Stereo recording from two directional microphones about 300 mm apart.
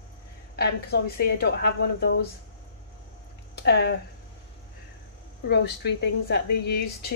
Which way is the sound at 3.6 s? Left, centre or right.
Left.